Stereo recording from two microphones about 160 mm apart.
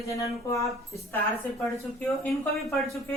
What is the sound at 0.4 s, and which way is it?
Speech, 20° left (ahead or behind).